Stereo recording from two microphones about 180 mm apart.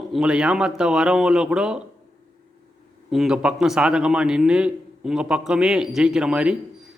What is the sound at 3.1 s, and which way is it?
A man's voice, centre (ahead or behind).